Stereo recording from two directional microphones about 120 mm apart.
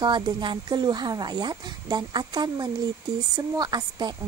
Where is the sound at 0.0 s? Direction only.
40° right (ahead or behind).